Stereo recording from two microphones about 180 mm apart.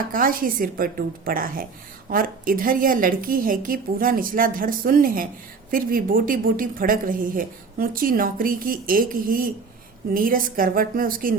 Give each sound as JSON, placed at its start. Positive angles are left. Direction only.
{"t": 0.1, "sound": "a woman's voice", "side_deg": -50}